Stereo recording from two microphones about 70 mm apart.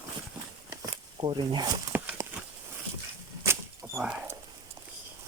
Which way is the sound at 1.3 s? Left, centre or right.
Right.